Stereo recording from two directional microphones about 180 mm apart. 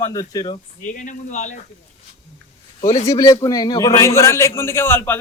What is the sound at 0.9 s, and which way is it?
Speech, 45° left (ahead or behind).